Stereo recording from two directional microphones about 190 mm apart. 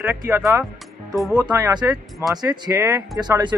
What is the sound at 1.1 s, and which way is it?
Speech, centre (ahead or behind).